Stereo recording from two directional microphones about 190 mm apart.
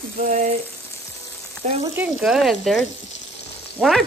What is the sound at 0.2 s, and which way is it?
Frying, 50° right (ahead or behind).